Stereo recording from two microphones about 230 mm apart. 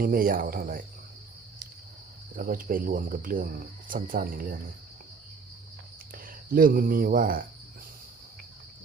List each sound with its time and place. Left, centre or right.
0.0 s cricket: right
2.3 s cricket: right
6.5 s cricket: right